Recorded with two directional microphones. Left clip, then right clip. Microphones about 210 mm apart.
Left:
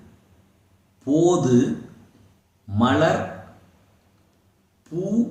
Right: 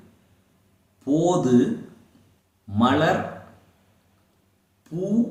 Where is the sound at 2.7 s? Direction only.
5° right (ahead or behind).